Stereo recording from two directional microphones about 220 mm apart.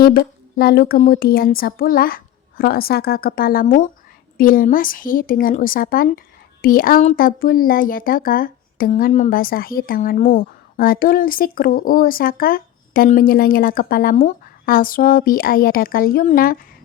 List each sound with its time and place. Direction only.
0.0 s speech: 45° left (ahead or behind)